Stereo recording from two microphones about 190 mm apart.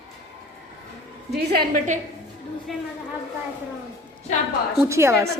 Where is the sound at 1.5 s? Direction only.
45° right (ahead or behind).